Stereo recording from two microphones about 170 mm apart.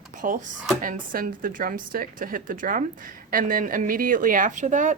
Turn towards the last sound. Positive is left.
turn(degrees=-45)  # may be behind; listen again after turning